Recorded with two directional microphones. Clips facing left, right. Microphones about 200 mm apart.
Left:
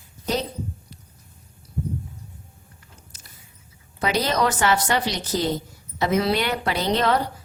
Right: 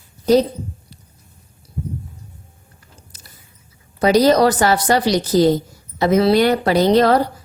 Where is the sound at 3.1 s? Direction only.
35° right (ahead or behind).